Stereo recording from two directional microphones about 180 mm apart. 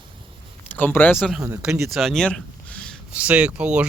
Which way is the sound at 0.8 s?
10° left (ahead or behind).